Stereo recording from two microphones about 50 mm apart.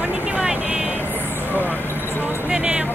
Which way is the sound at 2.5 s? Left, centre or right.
Right.